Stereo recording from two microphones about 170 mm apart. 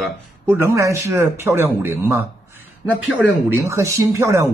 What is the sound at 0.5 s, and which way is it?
Speech, 15° right (ahead or behind).